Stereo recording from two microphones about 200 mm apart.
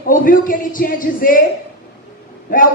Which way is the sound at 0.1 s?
45° left (ahead or behind).